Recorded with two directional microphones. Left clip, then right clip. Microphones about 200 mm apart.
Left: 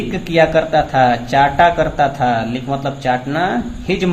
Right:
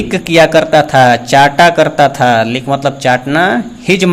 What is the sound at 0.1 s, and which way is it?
Speech, 40° right (ahead or behind).